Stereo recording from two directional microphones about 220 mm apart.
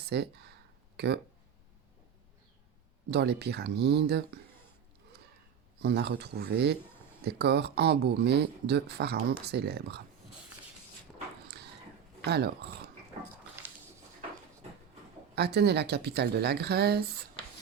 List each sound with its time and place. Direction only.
0.1 s speech: 50° right (ahead or behind)
3.1 s speech: 50° right (ahead or behind)
5.8 s speech: 50° right (ahead or behind)
11.4 s a sound: 45° right (ahead or behind)
12.2 s speech: 45° right (ahead or behind)
15.4 s speech: 50° right (ahead or behind)